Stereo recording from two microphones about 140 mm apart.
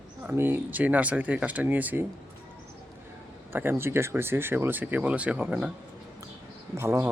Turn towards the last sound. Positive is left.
turn(degrees=-20)  # may be behind; listen again after turning